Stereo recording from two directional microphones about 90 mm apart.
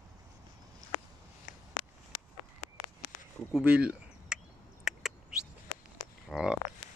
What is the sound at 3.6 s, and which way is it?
Speech, 15° right (ahead or behind).